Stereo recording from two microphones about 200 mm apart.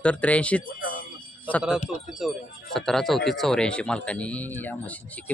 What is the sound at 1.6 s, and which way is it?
Speech, centre (ahead or behind).